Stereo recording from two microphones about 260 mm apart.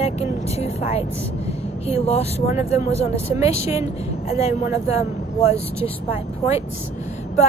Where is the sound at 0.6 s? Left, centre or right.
Left.